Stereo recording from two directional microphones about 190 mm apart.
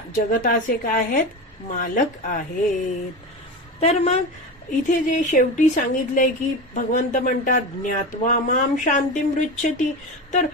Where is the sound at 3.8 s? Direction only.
35° left (ahead or behind).